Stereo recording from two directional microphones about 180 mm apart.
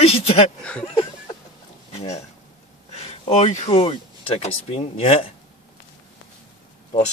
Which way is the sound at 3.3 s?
35° left (ahead or behind).